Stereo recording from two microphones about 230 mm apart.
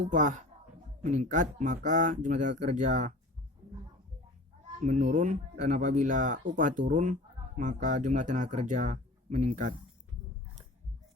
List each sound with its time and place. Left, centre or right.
0.1 s speech: right
4.8 s speech: right